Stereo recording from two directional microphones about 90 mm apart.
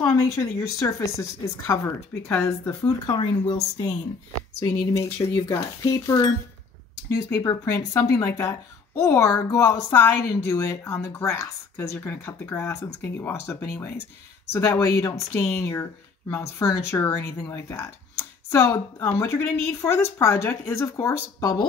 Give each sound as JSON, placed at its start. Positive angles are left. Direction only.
{"t": 0.0, "sound": "speech", "side_deg": 35}
{"t": 3.2, "sound": "speech", "side_deg": 60}
{"t": 4.6, "sound": "speech", "side_deg": 35}
{"t": 7.2, "sound": "speech", "side_deg": 35}
{"t": 12.1, "sound": "speech", "side_deg": 25}
{"t": 14.6, "sound": "speech", "side_deg": 40}